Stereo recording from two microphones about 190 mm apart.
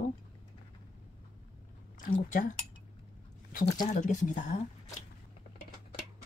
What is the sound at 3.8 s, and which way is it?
Speech, 40° left (ahead or behind).